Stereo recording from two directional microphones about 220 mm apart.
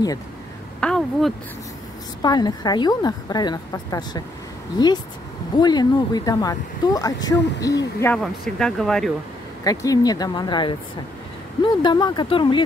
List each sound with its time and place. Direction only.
0.7 s a sound: 5° left (ahead or behind)
2.2 s a woman's voice: 20° left (ahead or behind)
8.2 s speech: 5° left (ahead or behind)
9.7 s a woman's voice: 15° left (ahead or behind)